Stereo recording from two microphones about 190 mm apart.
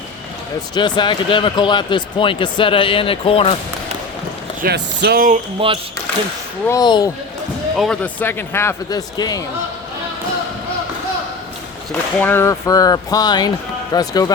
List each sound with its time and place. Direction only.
0.7 s speech: 25° left (ahead or behind)
4.6 s speech: 55° right (ahead or behind)
5.5 s speech: 30° right (ahead or behind)
6.7 s speech: 20° left (ahead or behind)
7.8 s speech: 5° left (ahead or behind); by 9.4 s 20° left (ahead or behind)
11.9 s speech: 10° left (ahead or behind)